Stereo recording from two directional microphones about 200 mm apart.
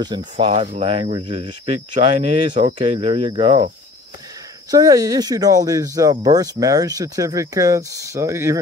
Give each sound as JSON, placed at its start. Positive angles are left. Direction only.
{"t": 0.4, "sound": "speech", "side_deg": -30}